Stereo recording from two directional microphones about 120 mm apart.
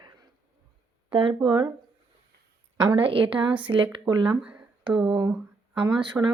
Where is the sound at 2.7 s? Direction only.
40° right (ahead or behind).